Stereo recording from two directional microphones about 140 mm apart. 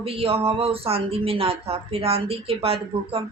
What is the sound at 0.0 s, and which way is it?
Speech, 45° right (ahead or behind).